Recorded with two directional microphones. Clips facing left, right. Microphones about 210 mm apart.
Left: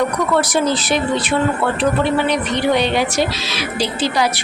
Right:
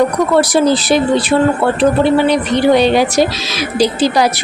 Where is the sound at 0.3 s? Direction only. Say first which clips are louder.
Right 6 dB; 35° right (ahead or behind).